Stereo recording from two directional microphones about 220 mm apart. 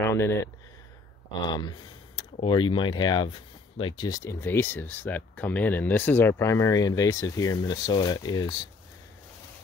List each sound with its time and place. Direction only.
0.0 s speech: 10° left (ahead or behind)
1.5 s speech: 20° left (ahead or behind)